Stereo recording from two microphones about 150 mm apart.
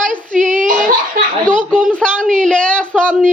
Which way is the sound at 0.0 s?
60° right (ahead or behind).